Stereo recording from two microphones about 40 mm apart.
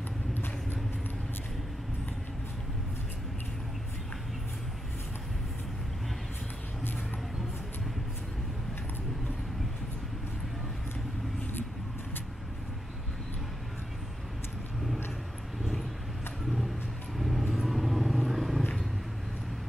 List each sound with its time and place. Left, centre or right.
0.3 s vehicle: left
16.4 s a sound: centre
17.2 s vehicle: centre